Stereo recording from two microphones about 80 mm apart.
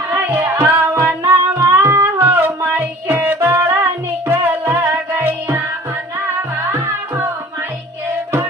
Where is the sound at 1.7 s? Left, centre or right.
Right.